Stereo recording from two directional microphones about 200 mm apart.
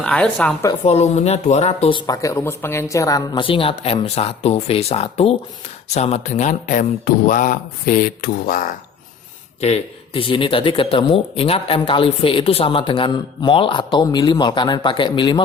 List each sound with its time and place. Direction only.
0.0 s speech: 5° left (ahead or behind)
0.9 s speech: 35° left (ahead or behind)
9.6 s speech: 30° left (ahead or behind)